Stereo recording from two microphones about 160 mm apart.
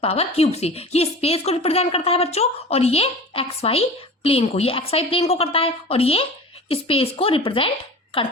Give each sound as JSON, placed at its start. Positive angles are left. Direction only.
{"t": 0.0, "sound": "a woman's voice", "side_deg": 40}